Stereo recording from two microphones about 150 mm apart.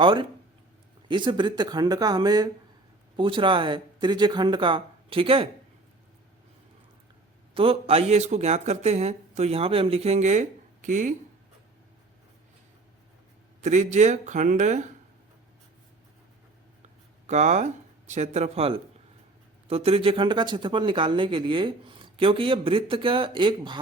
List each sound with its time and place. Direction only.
0.0 s speech: 30° right (ahead or behind)
7.5 s speech: 40° right (ahead or behind); by 11.1 s 55° right (ahead or behind)
13.6 s speech: 55° right (ahead or behind)
17.2 s speech: 50° right (ahead or behind); by 23.8 s 30° right (ahead or behind)